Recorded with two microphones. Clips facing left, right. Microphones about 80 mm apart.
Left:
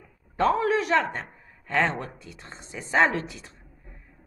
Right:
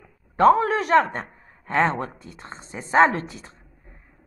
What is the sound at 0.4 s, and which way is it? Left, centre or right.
A woman's voice, right.